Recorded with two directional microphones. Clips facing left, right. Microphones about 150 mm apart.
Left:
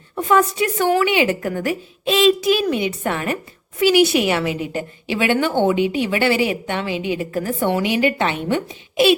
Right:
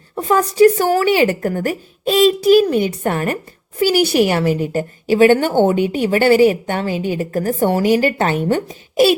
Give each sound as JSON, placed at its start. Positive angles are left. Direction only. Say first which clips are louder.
{"t": 0.2, "sound": "a woman's voice", "louder": "right 5 dB", "side_deg": -35}